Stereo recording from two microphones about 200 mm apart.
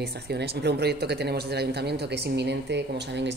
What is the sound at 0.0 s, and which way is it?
Speech, 55° right (ahead or behind).